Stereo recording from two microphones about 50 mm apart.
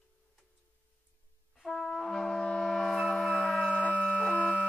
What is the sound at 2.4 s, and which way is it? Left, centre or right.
Music, centre.